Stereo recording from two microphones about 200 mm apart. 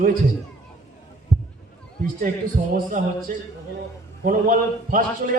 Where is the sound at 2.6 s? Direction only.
35° right (ahead or behind).